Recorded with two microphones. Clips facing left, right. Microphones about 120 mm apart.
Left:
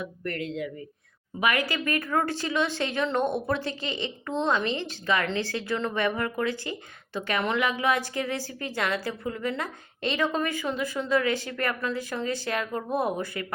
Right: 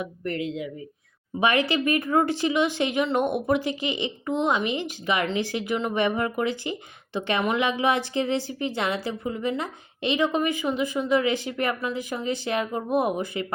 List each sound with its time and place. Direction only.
0.0 s speech: 20° right (ahead or behind)